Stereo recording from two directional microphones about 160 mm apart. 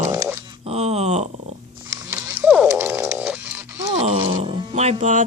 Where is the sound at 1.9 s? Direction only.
15° right (ahead or behind).